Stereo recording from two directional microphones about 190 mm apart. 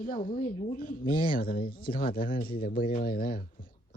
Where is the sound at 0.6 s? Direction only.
45° left (ahead or behind).